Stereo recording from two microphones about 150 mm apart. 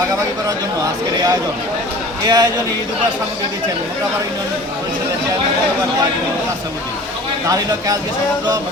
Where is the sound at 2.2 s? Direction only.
25° right (ahead or behind).